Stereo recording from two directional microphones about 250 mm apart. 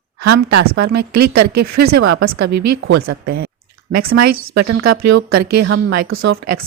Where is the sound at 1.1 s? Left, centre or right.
Right.